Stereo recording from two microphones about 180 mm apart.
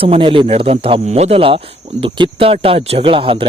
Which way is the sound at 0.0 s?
30° right (ahead or behind).